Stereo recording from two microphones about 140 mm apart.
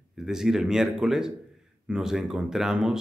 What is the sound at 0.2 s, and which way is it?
Speech, 5° right (ahead or behind).